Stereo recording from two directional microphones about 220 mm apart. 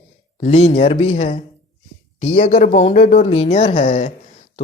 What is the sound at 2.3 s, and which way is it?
Speech, 35° left (ahead or behind).